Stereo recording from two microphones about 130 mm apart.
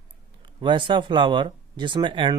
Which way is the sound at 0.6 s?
40° right (ahead or behind).